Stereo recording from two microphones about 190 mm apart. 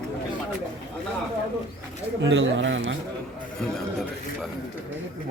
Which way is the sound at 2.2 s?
75° right (ahead or behind).